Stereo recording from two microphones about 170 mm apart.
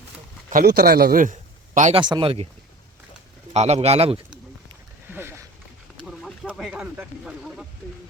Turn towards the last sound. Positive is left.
turn(degrees=-5)  # may be behind; listen again after turning